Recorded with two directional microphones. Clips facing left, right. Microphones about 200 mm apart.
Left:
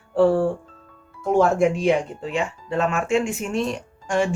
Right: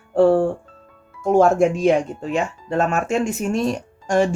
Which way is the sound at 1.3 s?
45° right (ahead or behind).